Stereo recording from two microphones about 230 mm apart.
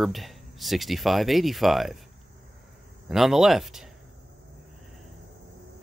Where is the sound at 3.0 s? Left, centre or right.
Centre.